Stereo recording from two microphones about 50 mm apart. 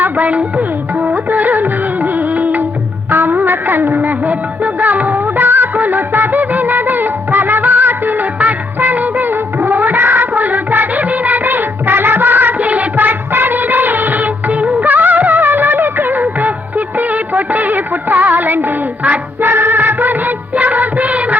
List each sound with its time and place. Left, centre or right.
0.0 s music: right
3.1 s music of bollywood: right
19.5 s music of bollywood: right